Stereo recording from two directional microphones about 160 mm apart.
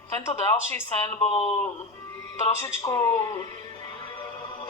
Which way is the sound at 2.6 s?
15° left (ahead or behind).